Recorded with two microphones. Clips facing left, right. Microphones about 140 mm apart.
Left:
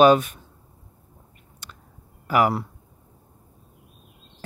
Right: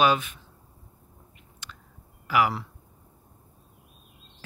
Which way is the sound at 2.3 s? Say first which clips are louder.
Left 4 dB; 45° left (ahead or behind).